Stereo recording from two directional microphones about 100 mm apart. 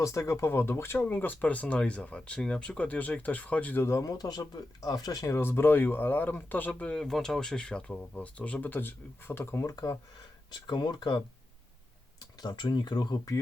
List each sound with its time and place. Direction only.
0.0 s speech: 30° left (ahead or behind)
10.5 s speech: 45° left (ahead or behind)
12.2 s speech: 45° left (ahead or behind)